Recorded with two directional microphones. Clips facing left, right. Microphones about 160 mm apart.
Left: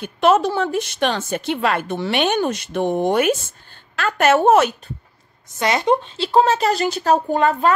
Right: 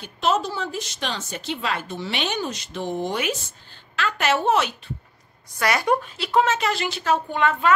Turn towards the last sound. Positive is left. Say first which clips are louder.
# left 4 dB
turn(degrees=40)  # may be behind; listen again after turning